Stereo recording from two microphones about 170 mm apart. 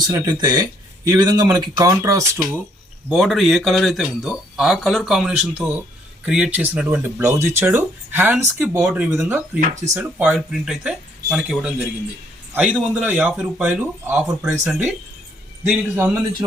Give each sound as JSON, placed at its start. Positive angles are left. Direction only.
{"t": 0.0, "sound": "speech", "side_deg": -25}
{"t": 3.1, "sound": "speech", "side_deg": 0}